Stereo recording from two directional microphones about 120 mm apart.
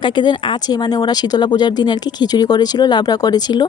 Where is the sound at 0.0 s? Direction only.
40° left (ahead or behind).